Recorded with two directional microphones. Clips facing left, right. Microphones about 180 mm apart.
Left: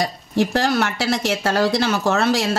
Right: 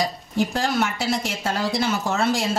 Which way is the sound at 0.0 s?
75° left (ahead or behind).